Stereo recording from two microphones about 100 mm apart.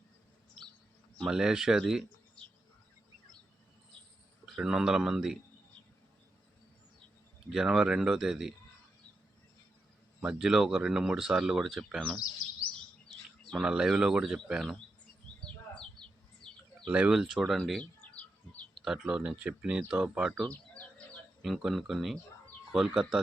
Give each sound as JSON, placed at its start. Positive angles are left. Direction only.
{"t": 1.3, "sound": "speech", "side_deg": -5}
{"t": 4.5, "sound": "speech", "side_deg": -5}
{"t": 7.5, "sound": "speech", "side_deg": -5}
{"t": 10.2, "sound": "speech", "side_deg": -5}
{"t": 13.6, "sound": "speech", "side_deg": -10}
{"t": 15.8, "sound": "a sound", "side_deg": 5}
{"t": 16.8, "sound": "speech", "side_deg": -10}
{"t": 17.3, "sound": "bird", "side_deg": 0}
{"t": 18.9, "sound": "speech", "side_deg": -5}
{"t": 20.4, "sound": "a sound", "side_deg": 15}
{"t": 21.4, "sound": "speech", "side_deg": 0}